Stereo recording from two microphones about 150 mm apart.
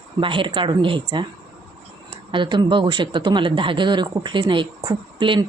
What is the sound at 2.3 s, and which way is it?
Speech, 30° right (ahead or behind).